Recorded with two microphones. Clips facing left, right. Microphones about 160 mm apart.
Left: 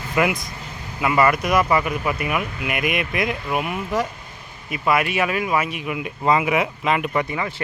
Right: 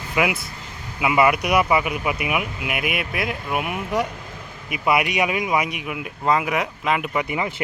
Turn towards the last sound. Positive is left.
turn(degrees=-20)  # may be behind; listen again after turning